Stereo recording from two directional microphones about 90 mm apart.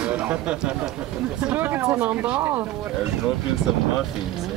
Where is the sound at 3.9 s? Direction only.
5° right (ahead or behind).